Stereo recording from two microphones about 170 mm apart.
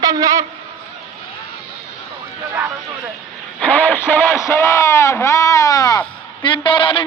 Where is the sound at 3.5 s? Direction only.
10° left (ahead or behind).